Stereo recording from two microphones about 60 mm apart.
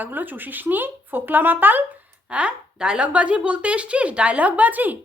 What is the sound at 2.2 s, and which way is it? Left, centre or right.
A woman's voice, centre.